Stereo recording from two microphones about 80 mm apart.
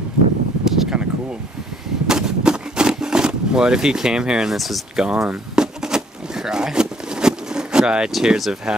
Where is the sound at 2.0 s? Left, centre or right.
Centre.